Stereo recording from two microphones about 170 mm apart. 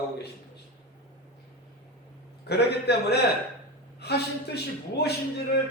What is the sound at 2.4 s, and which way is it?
A man's voice, 75° left (ahead or behind).